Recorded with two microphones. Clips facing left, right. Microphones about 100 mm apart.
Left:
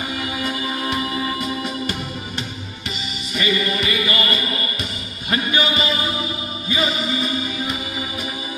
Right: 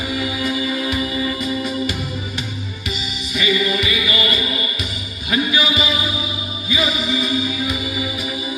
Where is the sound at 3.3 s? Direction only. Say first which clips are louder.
Right 2 dB; 45° left (ahead or behind).